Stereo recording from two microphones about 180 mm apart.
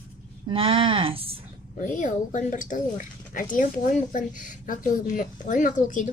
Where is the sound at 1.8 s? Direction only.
45° left (ahead or behind).